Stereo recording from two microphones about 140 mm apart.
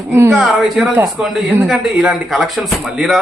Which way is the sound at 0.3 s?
5° right (ahead or behind).